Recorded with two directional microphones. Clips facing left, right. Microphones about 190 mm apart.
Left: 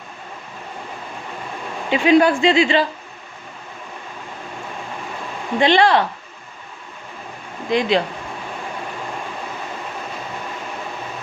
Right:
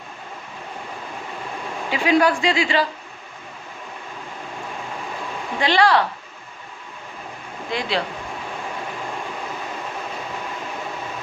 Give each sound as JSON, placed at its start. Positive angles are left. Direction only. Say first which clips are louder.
{"t": 1.9, "sound": "speech", "louder": "left 4 dB", "side_deg": 20}
{"t": 5.5, "sound": "speech", "louder": "left 3 dB", "side_deg": 20}
{"t": 7.7, "sound": "speech", "louder": "left 7 dB", "side_deg": 20}